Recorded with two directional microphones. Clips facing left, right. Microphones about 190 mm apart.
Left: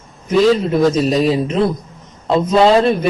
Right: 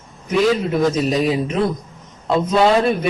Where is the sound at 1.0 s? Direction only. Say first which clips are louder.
Left 3 dB; 35° left (ahead or behind).